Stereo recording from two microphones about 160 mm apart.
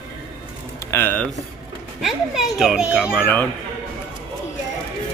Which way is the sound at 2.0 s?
Centre (ahead or behind).